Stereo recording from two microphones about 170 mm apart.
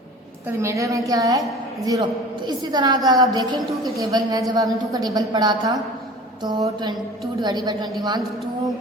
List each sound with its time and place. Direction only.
0.4 s a woman's voice: 15° right (ahead or behind)